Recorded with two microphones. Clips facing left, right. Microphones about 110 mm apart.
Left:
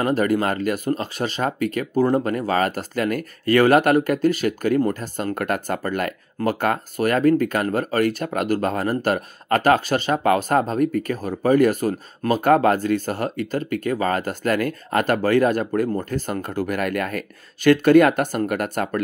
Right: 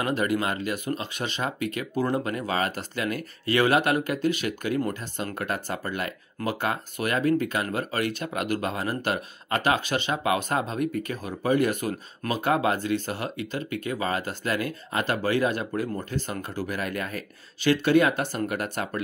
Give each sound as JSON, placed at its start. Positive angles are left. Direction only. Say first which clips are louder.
{"t": 0.0, "sound": "speech", "louder": "left 6 dB", "side_deg": 40}